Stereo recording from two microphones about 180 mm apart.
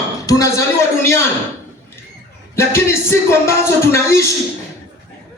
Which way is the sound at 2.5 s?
15° left (ahead or behind).